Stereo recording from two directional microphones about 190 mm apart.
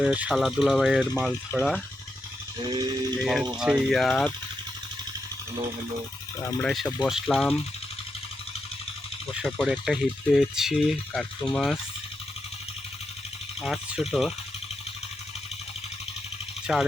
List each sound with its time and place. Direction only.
0.0 s speech: 5° right (ahead or behind)
2.6 s toothbrush: 20° right (ahead or behind)
3.6 s speech: 5° right (ahead or behind)
6.4 s speech: 15° left (ahead or behind)
6.7 s speech: 5° left (ahead or behind)
9.3 s speech: centre (ahead or behind)
13.6 s speech: 5° right (ahead or behind)
16.7 s speech: centre (ahead or behind)